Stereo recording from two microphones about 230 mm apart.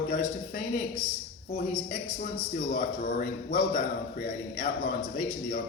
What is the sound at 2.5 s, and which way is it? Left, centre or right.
A man's voice, left.